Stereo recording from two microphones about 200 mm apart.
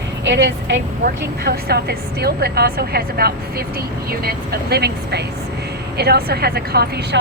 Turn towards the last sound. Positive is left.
turn(degrees=-50)  # may be behind; listen again after turning